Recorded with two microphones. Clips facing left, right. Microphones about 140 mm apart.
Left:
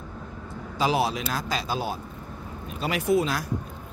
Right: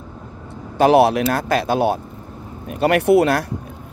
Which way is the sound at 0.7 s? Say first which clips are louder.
Right 12 dB; 60° right (ahead or behind).